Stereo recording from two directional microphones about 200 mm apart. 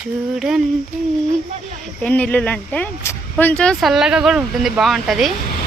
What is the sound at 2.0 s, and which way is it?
Speech, 5° left (ahead or behind).